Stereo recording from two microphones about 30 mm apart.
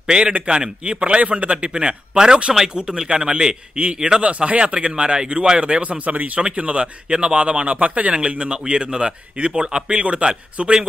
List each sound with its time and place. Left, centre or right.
0.5 s a man's voice: right
3.7 s a man's voice: right
6.5 s speech: right
8.1 s a man's voice: right
9.6 s speech: right
9.8 s speech: right